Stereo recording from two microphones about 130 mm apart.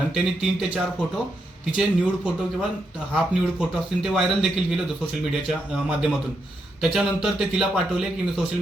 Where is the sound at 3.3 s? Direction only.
5° right (ahead or behind).